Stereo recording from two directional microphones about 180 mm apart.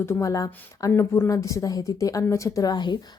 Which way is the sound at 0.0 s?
15° left (ahead or behind).